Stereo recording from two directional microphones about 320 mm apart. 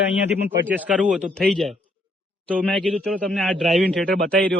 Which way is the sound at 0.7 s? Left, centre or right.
Centre.